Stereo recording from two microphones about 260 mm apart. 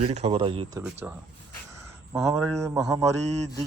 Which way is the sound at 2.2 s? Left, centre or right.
Centre.